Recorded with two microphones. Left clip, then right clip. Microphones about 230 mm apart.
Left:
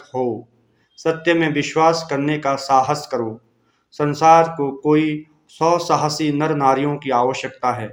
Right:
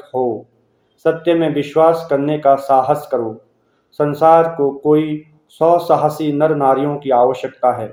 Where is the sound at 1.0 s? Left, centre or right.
Left.